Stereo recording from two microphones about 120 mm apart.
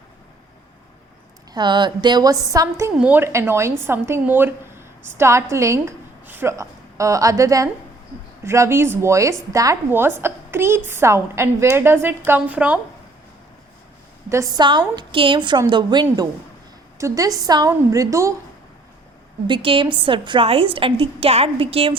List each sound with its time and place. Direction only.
1.5 s a woman's voice: 40° right (ahead or behind)
3.0 s a woman's voice: 15° right (ahead or behind)
14.3 s a woman's voice: 25° right (ahead or behind)
14.6 s a woman's voice: 40° right (ahead or behind)
19.5 s a woman's voice: 45° right (ahead or behind)